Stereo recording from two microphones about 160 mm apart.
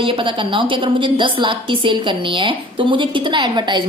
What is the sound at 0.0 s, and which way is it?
A woman's voice, 30° right (ahead or behind).